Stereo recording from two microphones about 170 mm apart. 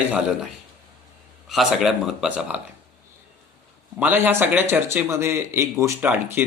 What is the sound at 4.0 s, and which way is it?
A man's voice, 10° right (ahead or behind).